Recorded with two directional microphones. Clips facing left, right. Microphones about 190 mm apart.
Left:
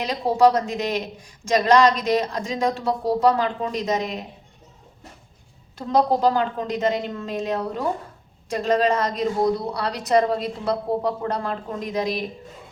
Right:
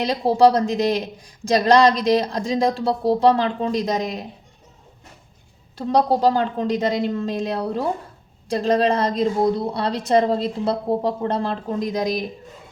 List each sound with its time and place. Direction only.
0.0 s a woman's voice: 35° right (ahead or behind)
5.7 s a woman's voice: 35° right (ahead or behind)